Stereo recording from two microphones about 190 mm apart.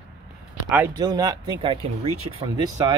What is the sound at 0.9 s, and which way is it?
Speech, 20° right (ahead or behind).